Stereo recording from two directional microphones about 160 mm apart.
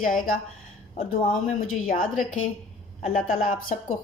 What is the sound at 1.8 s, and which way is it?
Speech, 60° left (ahead or behind).